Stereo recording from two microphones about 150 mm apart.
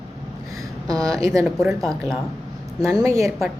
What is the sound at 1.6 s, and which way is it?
Speech, centre (ahead or behind).